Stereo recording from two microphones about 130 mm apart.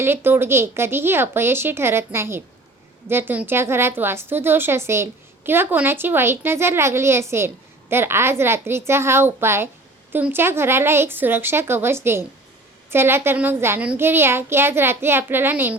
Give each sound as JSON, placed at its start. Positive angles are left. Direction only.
{"t": 0.0, "sound": "a child's voice", "side_deg": -20}